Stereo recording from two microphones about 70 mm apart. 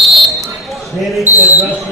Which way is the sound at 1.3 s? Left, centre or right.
Left.